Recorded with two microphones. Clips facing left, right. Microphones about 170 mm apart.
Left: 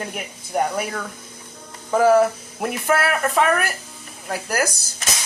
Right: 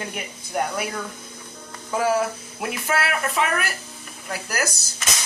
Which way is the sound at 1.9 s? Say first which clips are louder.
Left 7 dB; 45° left (ahead or behind).